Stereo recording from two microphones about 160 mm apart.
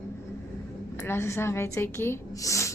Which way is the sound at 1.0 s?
15° left (ahead or behind).